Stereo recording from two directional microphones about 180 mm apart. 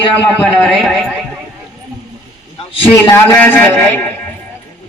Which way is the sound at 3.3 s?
5° left (ahead or behind).